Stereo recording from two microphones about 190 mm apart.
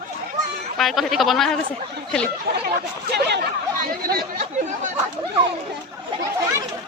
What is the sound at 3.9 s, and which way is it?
Speech, 50° right (ahead or behind).